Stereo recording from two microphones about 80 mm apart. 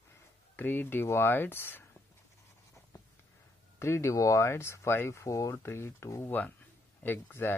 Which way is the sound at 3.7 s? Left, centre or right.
Left.